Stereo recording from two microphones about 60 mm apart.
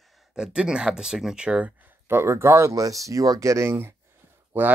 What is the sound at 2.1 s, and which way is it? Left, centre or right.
Speech, right.